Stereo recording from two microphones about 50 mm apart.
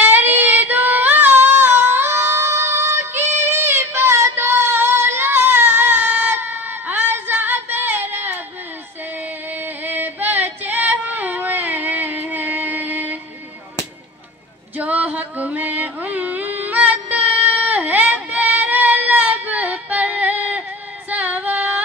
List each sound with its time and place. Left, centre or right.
0.0 s child singing: right
9.5 s a sound: right
14.8 s music: right
21.1 s female singing: right